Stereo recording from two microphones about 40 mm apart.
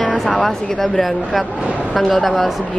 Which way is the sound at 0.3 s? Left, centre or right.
Centre.